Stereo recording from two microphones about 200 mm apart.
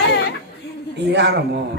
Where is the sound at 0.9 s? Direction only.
60° right (ahead or behind).